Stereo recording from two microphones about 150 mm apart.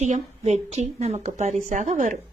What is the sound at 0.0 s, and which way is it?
A woman's voice, 50° right (ahead or behind).